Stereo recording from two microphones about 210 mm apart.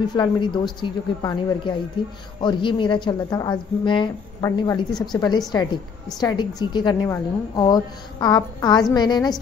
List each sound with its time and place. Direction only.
0.1 s a woman's voice: 20° left (ahead or behind)